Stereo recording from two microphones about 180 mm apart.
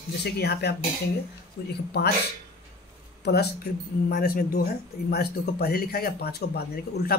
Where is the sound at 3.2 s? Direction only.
65° left (ahead or behind).